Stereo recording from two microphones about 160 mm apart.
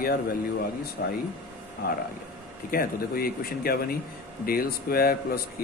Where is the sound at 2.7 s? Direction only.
70° left (ahead or behind).